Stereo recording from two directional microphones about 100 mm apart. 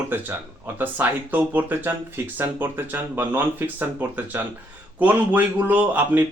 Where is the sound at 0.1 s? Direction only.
20° right (ahead or behind).